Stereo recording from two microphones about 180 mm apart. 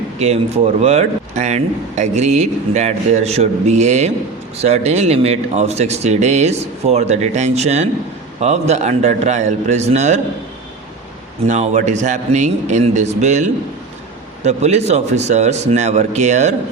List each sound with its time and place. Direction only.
0.2 s speech: 35° right (ahead or behind)
11.4 s speech: 40° right (ahead or behind)
14.4 s speech: 40° right (ahead or behind)